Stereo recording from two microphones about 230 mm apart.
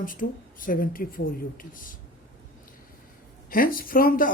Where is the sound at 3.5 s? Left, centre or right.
Left.